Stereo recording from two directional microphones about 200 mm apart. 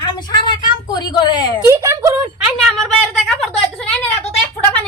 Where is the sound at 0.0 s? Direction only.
20° left (ahead or behind).